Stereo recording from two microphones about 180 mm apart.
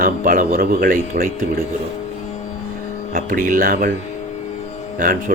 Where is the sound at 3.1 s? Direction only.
50° right (ahead or behind).